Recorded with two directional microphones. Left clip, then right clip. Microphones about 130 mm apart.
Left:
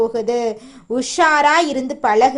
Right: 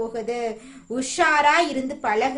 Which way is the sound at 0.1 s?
40° left (ahead or behind).